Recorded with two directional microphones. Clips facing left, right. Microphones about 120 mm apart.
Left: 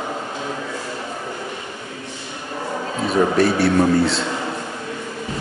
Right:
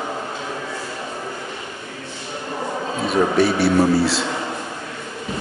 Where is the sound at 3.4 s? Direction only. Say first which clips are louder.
Right 1 dB; centre (ahead or behind).